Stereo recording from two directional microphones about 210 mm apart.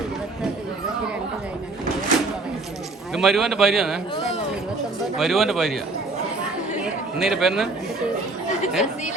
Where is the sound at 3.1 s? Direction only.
Centre (ahead or behind).